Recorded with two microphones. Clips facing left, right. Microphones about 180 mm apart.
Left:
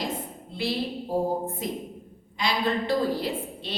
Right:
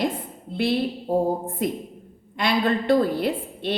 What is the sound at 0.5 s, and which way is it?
A woman's voice, 55° right (ahead or behind).